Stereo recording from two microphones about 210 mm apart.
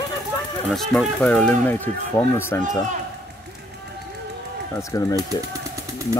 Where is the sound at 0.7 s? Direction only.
Centre (ahead or behind).